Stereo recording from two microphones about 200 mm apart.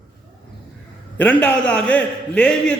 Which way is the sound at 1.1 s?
10° left (ahead or behind).